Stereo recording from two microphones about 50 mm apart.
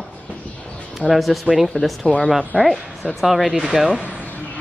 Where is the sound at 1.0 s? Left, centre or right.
Right.